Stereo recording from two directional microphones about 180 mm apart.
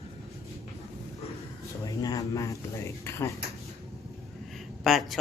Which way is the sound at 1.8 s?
20° left (ahead or behind).